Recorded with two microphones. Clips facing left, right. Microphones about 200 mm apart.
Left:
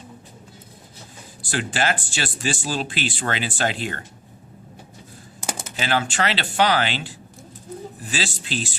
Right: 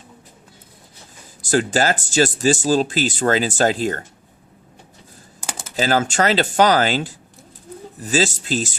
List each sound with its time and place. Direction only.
1.4 s speech: 40° right (ahead or behind)
5.7 s speech: 40° right (ahead or behind)